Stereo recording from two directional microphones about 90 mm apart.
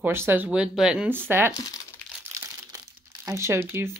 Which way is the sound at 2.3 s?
40° right (ahead or behind).